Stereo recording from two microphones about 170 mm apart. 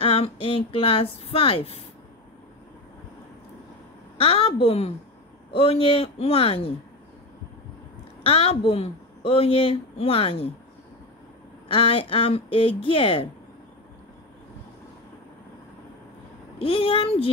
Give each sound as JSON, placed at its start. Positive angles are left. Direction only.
{"t": 0.0, "sound": "speech", "side_deg": 35}
{"t": 4.2, "sound": "a woman's voice", "side_deg": 35}
{"t": 8.2, "sound": "a woman's voice", "side_deg": 35}
{"t": 11.7, "sound": "a woman's voice", "side_deg": 35}
{"t": 16.5, "sound": "a woman's voice", "side_deg": 35}